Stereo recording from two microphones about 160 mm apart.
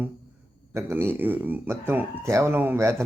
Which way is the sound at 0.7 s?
15° right (ahead or behind).